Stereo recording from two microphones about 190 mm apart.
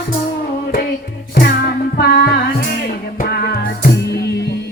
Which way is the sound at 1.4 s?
55° left (ahead or behind).